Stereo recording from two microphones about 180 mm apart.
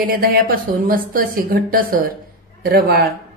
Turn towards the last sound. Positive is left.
turn(degrees=-60)  # may be behind; listen again after turning